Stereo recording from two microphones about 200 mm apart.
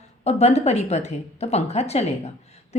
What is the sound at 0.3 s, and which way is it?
Speech, 30° left (ahead or behind).